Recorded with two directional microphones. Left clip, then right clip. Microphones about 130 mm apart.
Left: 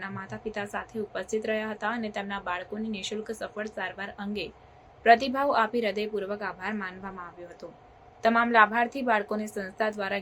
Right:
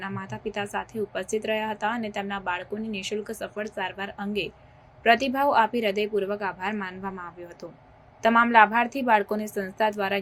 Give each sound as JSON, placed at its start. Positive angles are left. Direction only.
{"t": 0.0, "sound": "a woman's voice", "side_deg": -20}